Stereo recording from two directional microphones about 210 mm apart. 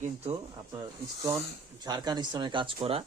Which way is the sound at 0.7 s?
15° right (ahead or behind).